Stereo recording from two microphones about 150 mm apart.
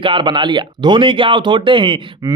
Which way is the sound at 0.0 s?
35° right (ahead or behind).